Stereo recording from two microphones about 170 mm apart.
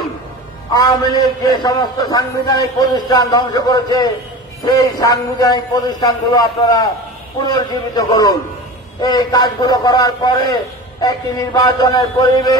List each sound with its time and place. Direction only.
0.7 s a man's voice: 25° left (ahead or behind)